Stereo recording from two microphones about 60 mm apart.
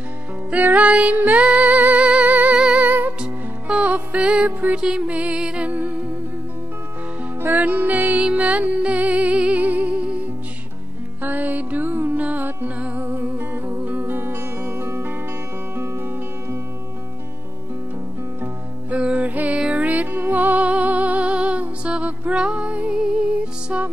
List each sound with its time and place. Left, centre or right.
0.5 s music: right
4.7 s music: centre
7.5 s music: right
11.2 s music: right
18.9 s music: right